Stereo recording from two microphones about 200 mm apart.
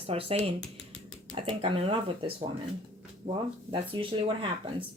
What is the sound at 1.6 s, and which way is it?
Speech, 30° right (ahead or behind).